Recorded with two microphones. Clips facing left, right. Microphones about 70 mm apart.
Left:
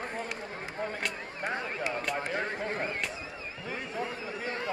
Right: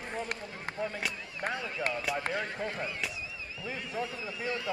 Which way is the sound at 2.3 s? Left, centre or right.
Left.